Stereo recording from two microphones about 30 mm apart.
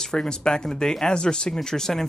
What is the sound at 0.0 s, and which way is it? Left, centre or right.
Speech, left.